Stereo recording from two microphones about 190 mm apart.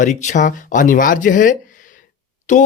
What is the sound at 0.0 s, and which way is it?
Speech, 40° left (ahead or behind).